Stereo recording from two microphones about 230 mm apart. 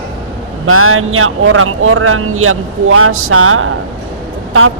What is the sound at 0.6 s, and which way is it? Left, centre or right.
Speech, right.